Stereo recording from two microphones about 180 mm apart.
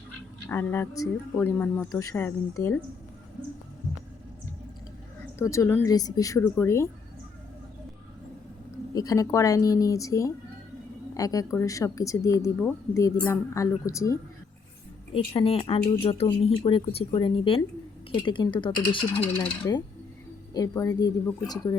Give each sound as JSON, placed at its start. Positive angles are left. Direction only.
{"t": 0.4, "sound": "speech", "side_deg": 15}
{"t": 5.4, "sound": "speech", "side_deg": 15}
{"t": 9.0, "sound": "speech", "side_deg": 20}
{"t": 15.1, "sound": "speech", "side_deg": 30}
{"t": 18.1, "sound": "coin", "side_deg": 25}